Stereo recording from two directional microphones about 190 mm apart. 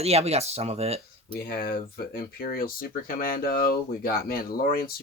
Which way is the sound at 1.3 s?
50° left (ahead or behind).